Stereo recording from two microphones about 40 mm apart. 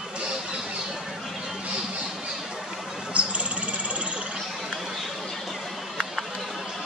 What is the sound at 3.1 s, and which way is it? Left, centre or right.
Bird, right.